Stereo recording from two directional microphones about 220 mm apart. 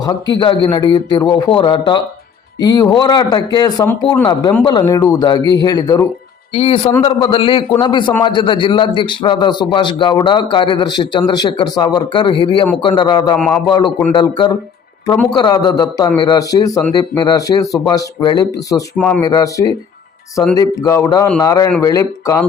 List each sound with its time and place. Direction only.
0.0 s a man's voice: 20° left (ahead or behind)
18.9 s speech: 5° left (ahead or behind)
19.2 s speech: 15° left (ahead or behind)